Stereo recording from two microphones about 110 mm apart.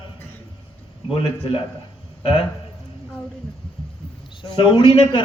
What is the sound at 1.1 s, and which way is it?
Speech, 55° left (ahead or behind).